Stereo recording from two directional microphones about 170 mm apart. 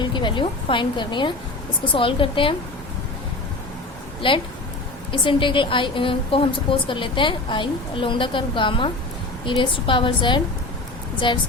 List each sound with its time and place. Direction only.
0.0 s a woman's voice: 25° left (ahead or behind)
4.2 s a woman's voice: 30° left (ahead or behind)